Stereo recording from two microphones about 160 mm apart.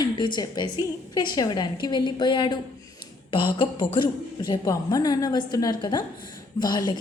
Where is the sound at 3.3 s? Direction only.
30° left (ahead or behind).